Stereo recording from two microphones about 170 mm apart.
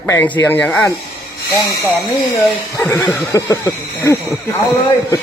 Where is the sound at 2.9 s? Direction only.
Centre (ahead or behind).